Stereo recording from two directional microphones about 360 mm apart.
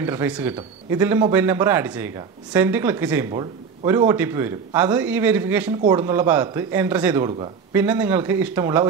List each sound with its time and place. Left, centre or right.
0.0 s speech: centre